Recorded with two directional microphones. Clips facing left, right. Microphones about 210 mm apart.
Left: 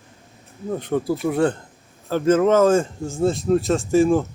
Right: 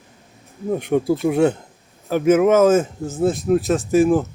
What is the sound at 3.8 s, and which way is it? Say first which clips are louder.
Speech: right 1 dB; 15° right (ahead or behind).